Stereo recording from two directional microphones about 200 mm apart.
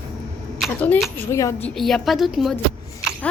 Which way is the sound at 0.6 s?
5° left (ahead or behind).